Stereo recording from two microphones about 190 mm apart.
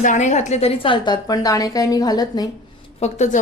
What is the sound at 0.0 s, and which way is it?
A woman's voice, 40° left (ahead or behind).